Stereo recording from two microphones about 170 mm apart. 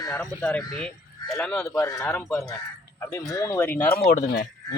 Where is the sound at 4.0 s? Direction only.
55° left (ahead or behind).